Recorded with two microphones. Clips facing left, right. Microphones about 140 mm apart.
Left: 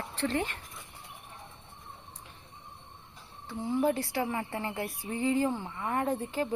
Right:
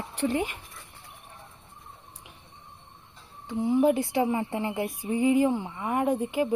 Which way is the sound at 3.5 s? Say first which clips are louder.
Right 6 dB; 15° right (ahead or behind).